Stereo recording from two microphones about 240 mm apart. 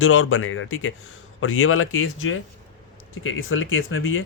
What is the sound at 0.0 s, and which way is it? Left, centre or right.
Speech, left.